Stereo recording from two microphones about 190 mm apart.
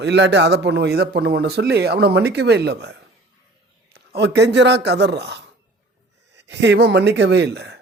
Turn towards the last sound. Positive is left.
turn(degrees=-65)  # may be behind; listen again after turning